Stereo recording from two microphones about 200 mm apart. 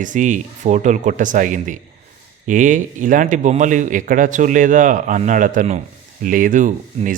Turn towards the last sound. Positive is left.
turn(degrees=-40)  # may be behind; listen again after turning